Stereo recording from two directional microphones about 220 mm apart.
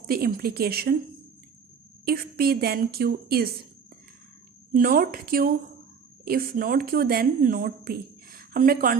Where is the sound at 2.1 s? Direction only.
45° right (ahead or behind).